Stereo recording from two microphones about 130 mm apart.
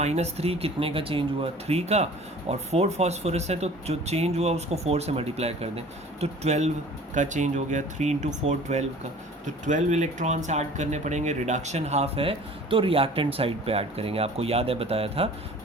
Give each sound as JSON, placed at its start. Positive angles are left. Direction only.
{"t": 0.0, "sound": "speech", "side_deg": -55}